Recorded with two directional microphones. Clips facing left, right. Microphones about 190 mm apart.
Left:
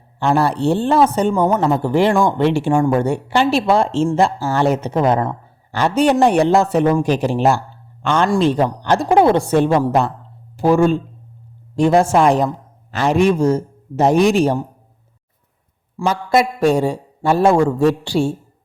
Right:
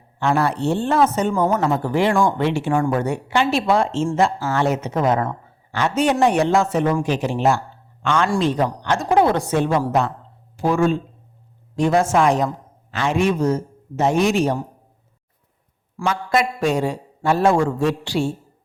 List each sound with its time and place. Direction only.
0.2 s a man's voice: 30° left (ahead or behind)
1.3 s a man's voice: 20° left (ahead or behind)
16.0 s a man's voice: 35° left (ahead or behind)